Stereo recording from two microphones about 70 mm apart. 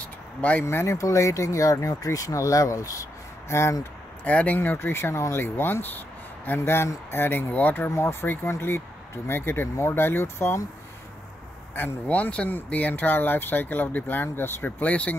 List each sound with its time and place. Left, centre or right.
0.0 s a sound: left
0.7 s speech: left
4.2 s speech: left
7.9 s speech: left
11.7 s speech: left
14.8 s speech: left